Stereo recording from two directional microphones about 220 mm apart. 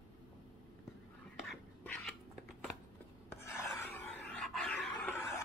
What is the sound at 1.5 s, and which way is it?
Dog, 5° left (ahead or behind).